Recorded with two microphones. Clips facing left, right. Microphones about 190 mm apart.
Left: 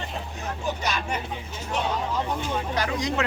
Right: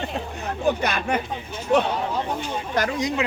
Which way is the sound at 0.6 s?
55° right (ahead or behind).